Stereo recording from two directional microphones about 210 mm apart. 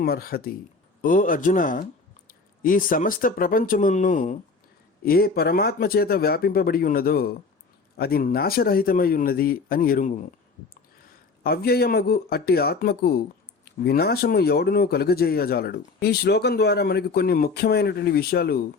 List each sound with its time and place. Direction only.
0.0 s speech: 45° left (ahead or behind)
11.4 s speech: 50° left (ahead or behind)